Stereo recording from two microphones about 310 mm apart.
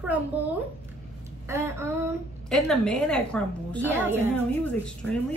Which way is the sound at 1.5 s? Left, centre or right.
Centre.